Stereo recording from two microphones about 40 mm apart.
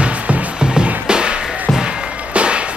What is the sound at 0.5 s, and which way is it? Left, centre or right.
Music, right.